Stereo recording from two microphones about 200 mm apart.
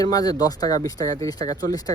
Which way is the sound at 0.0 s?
20° left (ahead or behind).